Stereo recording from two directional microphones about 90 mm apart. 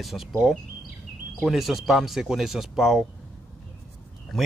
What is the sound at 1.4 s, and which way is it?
Speech, 5° right (ahead or behind).